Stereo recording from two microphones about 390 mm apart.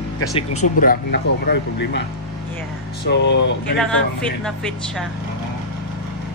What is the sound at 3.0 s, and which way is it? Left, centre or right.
Speech, left.